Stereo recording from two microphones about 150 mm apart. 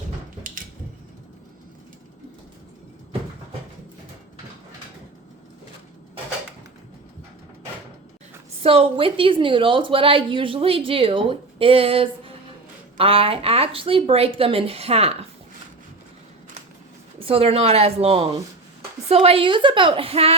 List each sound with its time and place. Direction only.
8.6 s a woman's voice: 40° right (ahead or behind)
17.2 s a woman's voice: 40° right (ahead or behind)